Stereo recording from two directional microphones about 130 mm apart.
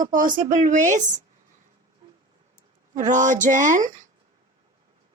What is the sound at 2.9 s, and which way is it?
Speech, 75° right (ahead or behind).